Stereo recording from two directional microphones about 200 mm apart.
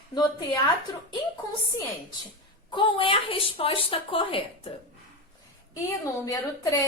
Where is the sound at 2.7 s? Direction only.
25° left (ahead or behind).